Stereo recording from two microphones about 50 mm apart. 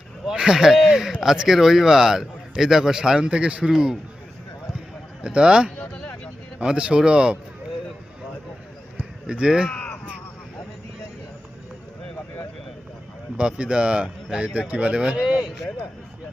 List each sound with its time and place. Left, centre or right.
0.3 s a man's voice: centre
5.2 s speech: centre
5.7 s a sound: centre
6.6 s speech: right
9.3 s a man's voice: centre
13.3 s speech: centre